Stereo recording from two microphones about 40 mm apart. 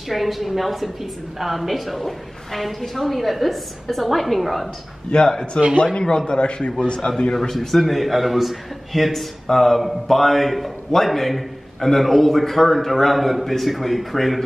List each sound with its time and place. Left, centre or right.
0.1 s a man's voice: centre
5.1 s a man's voice: left
7.3 s a man's voice: centre